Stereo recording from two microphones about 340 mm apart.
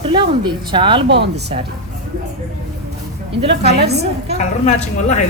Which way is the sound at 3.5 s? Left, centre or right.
Right.